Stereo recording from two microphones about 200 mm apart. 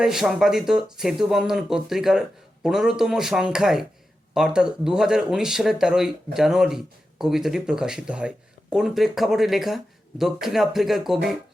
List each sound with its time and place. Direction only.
0.0 s speech: centre (ahead or behind)